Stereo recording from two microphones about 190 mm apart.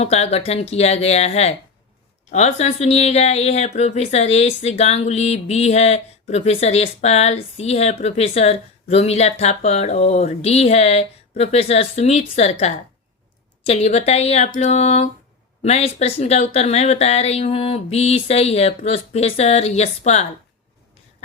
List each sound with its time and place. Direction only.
0.0 s speech: 35° left (ahead or behind)